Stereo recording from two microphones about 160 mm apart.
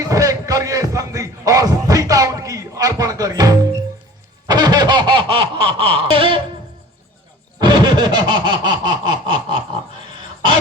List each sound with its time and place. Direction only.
0.0 s music: 20° right (ahead or behind)
4.4 s snicker: 25° right (ahead or behind)
7.6 s snicker: 30° right (ahead or behind)